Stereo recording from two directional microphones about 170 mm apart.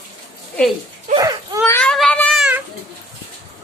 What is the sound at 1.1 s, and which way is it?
Baby cry, 20° right (ahead or behind).